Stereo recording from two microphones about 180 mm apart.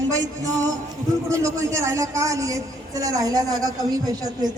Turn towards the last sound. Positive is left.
turn(degrees=-20)  # may be behind; listen again after turning